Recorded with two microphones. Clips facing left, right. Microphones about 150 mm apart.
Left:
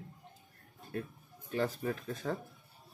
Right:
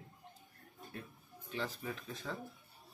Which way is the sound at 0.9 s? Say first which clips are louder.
Left 11 dB; 55° left (ahead or behind).